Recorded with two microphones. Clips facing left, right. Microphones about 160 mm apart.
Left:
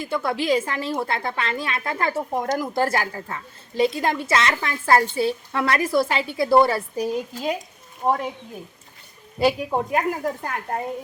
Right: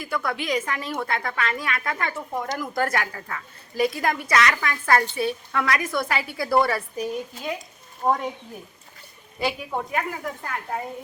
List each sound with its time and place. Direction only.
0.0 s a woman's voice: 25° left (ahead or behind)
2.7 s a woman's voice: 30° left (ahead or behind)
9.4 s a child's voice: 35° left (ahead or behind)